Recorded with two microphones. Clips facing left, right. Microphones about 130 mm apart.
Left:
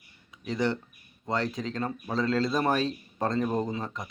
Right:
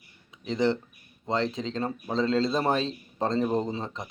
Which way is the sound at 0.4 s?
25° right (ahead or behind).